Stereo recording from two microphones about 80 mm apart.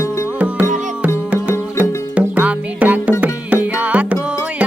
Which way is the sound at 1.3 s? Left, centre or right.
Centre.